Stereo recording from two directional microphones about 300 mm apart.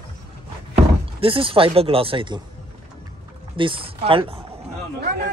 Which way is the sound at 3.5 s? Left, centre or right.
Centre.